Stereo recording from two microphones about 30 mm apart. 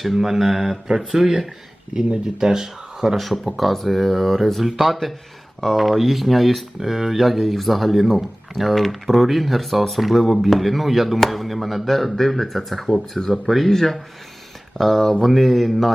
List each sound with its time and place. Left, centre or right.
0.0 s speech: centre
3.2 s speech: centre